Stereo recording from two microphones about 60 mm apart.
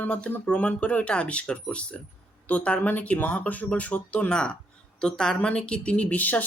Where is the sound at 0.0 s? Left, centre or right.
Left.